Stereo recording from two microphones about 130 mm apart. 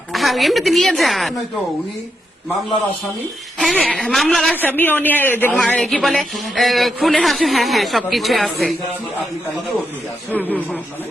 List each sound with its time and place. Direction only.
0.1 s a man's voice: centre (ahead or behind)
3.6 s a man's voice: centre (ahead or behind)
4.8 s a man's voice: 15° left (ahead or behind)
10.3 s speech: 15° left (ahead or behind)